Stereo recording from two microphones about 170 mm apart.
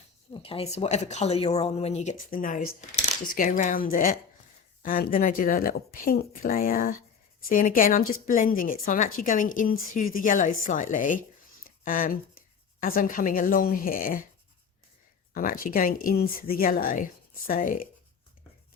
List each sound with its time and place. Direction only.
0.3 s speech: 35° left (ahead or behind); by 14.3 s 55° left (ahead or behind)
15.3 s speech: 55° left (ahead or behind)